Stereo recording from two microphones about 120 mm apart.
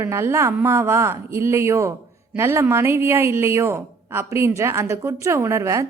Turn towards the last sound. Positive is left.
turn(degrees=-25)  # may be behind; listen again after turning